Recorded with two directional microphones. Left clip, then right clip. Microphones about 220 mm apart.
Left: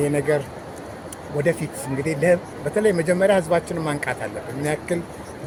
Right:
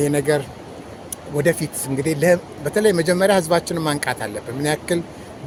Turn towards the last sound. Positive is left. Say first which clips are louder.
# right 3 dB
turn(degrees=-30)  # may be behind; listen again after turning